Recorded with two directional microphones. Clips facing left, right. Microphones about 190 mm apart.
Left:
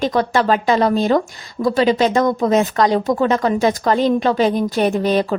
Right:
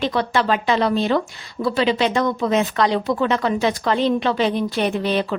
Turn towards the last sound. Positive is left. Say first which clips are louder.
# left 4 dB
turn(degrees=40)  # may be behind; listen again after turning